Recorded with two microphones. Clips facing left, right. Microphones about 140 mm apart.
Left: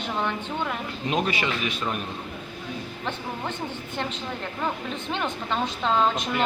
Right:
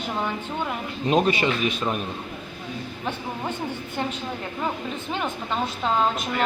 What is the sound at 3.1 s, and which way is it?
Speech, 10° right (ahead or behind).